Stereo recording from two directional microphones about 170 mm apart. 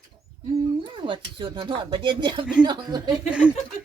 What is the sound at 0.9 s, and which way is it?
Speech, 30° right (ahead or behind).